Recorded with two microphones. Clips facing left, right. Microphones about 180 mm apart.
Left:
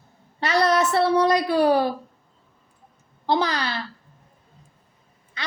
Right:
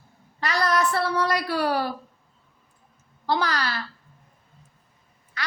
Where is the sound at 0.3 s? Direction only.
25° left (ahead or behind).